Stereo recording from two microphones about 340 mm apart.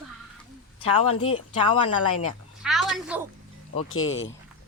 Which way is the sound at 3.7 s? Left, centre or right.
Left.